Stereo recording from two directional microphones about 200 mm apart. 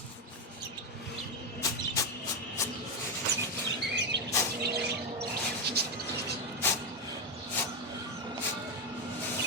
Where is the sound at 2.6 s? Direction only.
15° left (ahead or behind).